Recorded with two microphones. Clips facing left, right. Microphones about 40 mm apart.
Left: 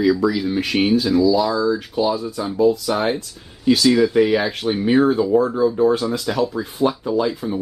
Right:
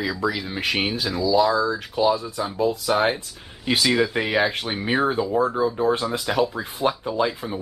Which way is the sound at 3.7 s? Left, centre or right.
Right.